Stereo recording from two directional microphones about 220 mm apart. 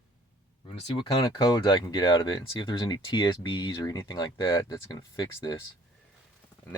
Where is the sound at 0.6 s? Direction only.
25° left (ahead or behind).